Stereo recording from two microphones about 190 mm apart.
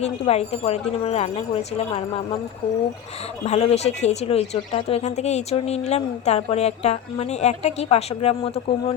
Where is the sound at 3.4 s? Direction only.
35° left (ahead or behind).